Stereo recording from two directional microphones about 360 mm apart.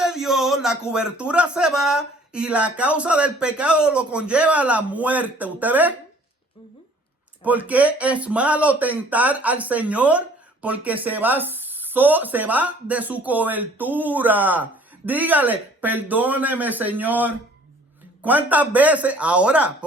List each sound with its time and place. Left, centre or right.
0.0 s speech: centre
7.4 s speech: centre